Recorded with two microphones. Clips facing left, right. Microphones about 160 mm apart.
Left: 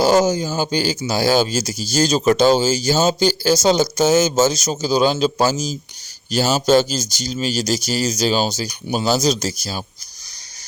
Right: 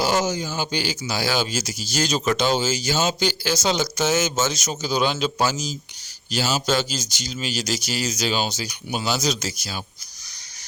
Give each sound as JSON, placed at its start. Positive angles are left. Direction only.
{"t": 0.0, "sound": "speech", "side_deg": 40}